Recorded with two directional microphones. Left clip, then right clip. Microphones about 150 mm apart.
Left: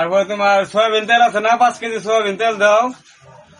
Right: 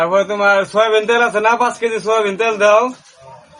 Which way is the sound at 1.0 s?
25° right (ahead or behind).